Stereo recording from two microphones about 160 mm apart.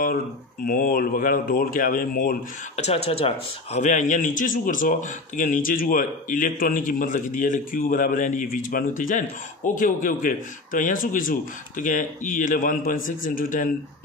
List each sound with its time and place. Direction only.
0.7 s a man's voice: 65° left (ahead or behind)
2.7 s a man's voice: 40° left (ahead or behind); by 13.7 s 55° left (ahead or behind)